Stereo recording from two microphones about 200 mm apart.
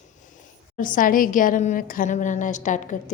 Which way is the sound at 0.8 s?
40° left (ahead or behind).